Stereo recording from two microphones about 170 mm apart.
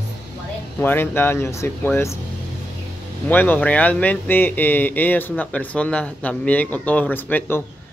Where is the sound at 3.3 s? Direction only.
10° left (ahead or behind).